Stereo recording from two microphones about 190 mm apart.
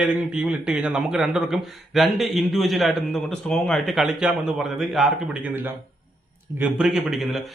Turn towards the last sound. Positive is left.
turn(degrees=0)  # may be behind; listen again after turning